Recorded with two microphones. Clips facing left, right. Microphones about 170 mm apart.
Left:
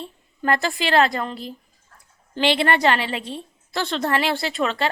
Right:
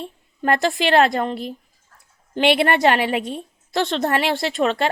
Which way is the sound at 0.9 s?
50° right (ahead or behind).